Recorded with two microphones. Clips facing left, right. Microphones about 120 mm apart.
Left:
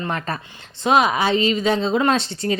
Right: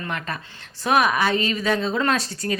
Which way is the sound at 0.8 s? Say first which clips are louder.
Left 2 dB; 20° left (ahead or behind).